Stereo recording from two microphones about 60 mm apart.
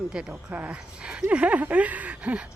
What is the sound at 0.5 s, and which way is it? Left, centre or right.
Speech, right.